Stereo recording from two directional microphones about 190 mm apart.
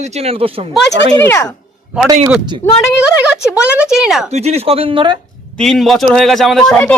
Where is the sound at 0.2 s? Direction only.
30° right (ahead or behind).